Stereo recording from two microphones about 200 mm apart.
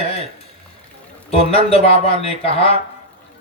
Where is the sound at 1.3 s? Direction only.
30° left (ahead or behind).